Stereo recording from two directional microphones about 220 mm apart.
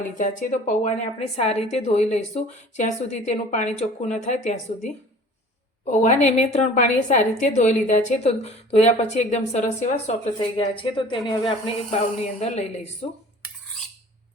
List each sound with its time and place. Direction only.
0.2 s a woman's voice: 35° left (ahead or behind)